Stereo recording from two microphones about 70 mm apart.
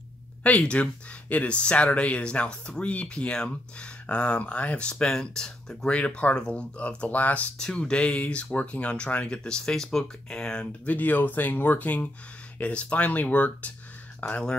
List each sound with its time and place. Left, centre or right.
0.4 s speech: centre
7.5 s speech: centre
10.9 s speech: left
14.2 s speech: centre